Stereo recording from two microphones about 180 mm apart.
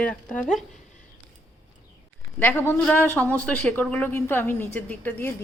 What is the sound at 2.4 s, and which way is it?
A man's voice, 10° left (ahead or behind).